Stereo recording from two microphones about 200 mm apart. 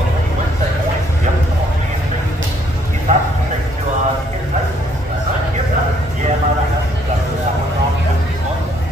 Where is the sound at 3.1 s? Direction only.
35° right (ahead or behind).